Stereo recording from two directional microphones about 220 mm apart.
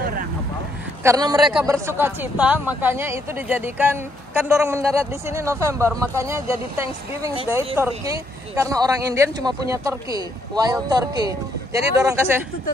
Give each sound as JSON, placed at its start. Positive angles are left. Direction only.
{"t": 1.0, "sound": "speech", "side_deg": -15}